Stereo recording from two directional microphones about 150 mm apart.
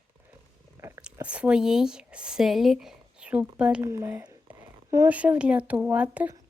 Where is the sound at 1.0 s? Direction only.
10° right (ahead or behind).